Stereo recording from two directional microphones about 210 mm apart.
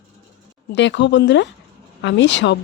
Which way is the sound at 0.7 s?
60° left (ahead or behind).